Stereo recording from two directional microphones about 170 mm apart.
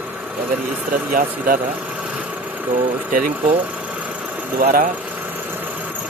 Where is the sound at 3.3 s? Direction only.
10° right (ahead or behind).